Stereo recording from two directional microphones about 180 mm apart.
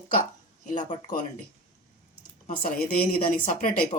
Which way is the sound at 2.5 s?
50° left (ahead or behind).